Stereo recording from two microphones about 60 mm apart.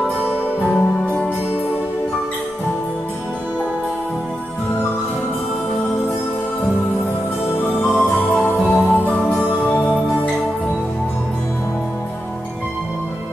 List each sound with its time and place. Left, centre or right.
0.7 s music: centre
7.8 s music: left